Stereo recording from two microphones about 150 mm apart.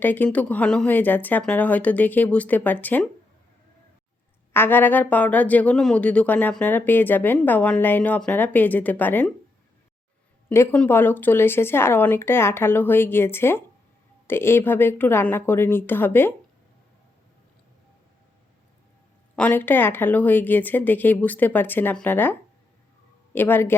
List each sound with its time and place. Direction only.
0.0 s speech: 10° left (ahead or behind)
4.5 s speech: 15° left (ahead or behind)
10.5 s speech: 15° left (ahead or behind)
19.4 s speech: 10° left (ahead or behind)